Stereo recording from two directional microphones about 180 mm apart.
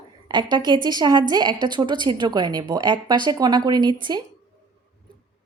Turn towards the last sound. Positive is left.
turn(degrees=-25)  # may be behind; listen again after turning